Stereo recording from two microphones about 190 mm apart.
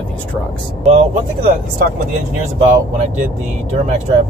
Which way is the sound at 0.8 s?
35° right (ahead or behind).